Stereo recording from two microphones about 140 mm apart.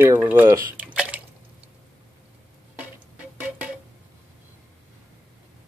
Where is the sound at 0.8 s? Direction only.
10° right (ahead or behind).